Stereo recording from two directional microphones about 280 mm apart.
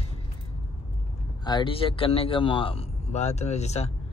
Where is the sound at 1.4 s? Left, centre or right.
Centre.